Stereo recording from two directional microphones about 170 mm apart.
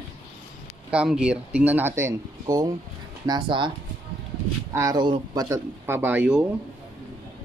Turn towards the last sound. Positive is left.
turn(degrees=-5)  # may be behind; listen again after turning